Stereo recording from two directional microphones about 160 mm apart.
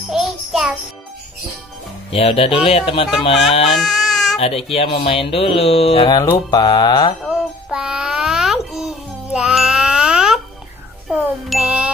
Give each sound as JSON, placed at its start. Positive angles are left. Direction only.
{"t": 0.1, "sound": "jingle bell", "side_deg": 0}
{"t": 2.0, "sound": "speech", "side_deg": 40}
{"t": 3.7, "sound": "baby cry", "side_deg": 0}
{"t": 4.4, "sound": "speech", "side_deg": 35}
{"t": 6.5, "sound": "mantra", "side_deg": 25}
{"t": 7.2, "sound": "child singing", "side_deg": -5}
{"t": 11.1, "sound": "ding", "side_deg": 0}